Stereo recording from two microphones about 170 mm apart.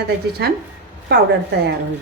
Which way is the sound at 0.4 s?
85° right.